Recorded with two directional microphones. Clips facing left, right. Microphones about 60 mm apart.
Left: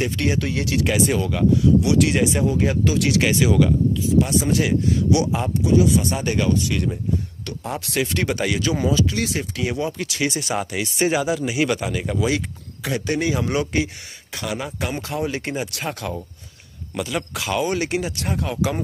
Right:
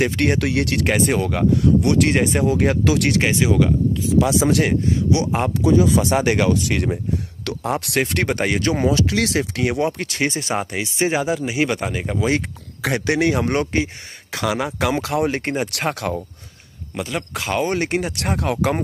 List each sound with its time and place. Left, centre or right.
0.0 s speech: right
2.4 s speech: right
3.2 s speech: right
4.1 s speech: right
5.3 s speech: right
6.0 s speech: right
8.0 s speech: right
8.9 s speech: right
12.8 s speech: right
13.3 s speech: right
14.3 s speech: right
16.9 s speech: right
17.3 s speech: right
18.1 s speech: right